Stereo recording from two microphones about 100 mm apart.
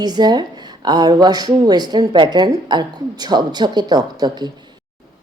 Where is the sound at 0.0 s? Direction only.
45° right (ahead or behind).